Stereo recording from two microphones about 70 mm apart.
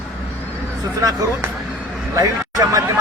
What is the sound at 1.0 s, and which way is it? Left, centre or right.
Speech, right.